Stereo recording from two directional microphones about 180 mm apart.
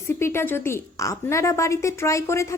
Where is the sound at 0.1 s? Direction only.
15° left (ahead or behind).